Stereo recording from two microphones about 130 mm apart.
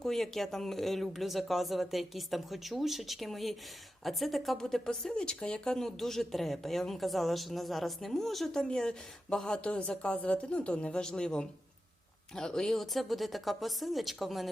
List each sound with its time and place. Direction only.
0.0 s speech: centre (ahead or behind)